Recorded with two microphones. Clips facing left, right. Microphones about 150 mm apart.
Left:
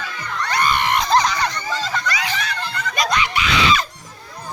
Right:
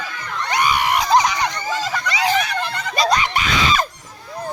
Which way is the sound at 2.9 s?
30° right (ahead or behind).